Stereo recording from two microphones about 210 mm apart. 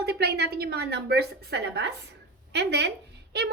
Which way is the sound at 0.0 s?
50° right (ahead or behind).